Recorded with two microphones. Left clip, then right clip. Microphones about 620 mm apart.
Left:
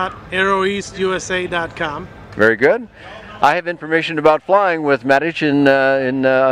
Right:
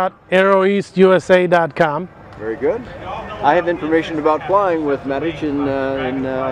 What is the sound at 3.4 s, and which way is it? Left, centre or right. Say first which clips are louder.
A man's voice: even; left.